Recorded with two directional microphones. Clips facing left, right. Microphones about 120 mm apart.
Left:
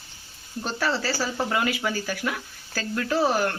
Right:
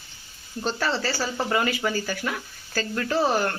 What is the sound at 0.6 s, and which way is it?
Speech, 5° left (ahead or behind).